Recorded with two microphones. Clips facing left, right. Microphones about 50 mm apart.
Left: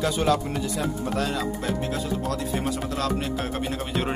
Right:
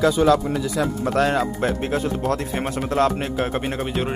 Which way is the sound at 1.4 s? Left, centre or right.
Right.